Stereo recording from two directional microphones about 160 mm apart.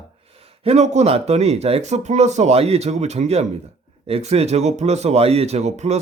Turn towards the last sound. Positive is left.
turn(degrees=-45)  # may be behind; listen again after turning